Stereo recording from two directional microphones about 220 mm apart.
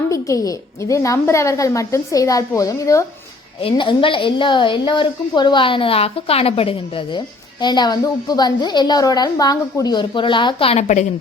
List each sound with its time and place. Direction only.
0.1 s a woman's voice: 15° left (ahead or behind); by 11.1 s 35° left (ahead or behind)